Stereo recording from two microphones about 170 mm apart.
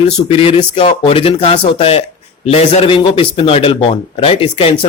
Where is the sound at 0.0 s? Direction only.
35° left (ahead or behind).